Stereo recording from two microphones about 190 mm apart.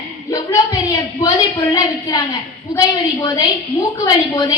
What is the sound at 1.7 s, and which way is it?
A woman's voice, 20° left (ahead or behind).